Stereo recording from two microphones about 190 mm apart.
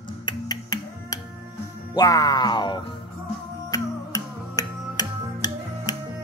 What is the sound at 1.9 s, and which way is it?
Speech, 20° left (ahead or behind).